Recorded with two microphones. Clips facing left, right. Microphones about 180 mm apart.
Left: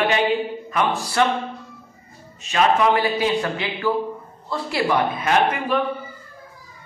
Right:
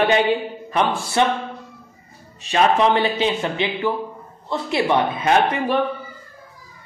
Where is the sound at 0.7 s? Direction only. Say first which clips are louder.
Right 3 dB; 25° right (ahead or behind).